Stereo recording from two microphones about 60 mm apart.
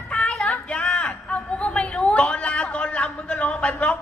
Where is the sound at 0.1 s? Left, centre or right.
Centre.